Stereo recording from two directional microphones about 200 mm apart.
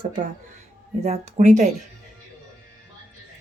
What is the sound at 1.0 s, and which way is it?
Speech, 30° right (ahead or behind).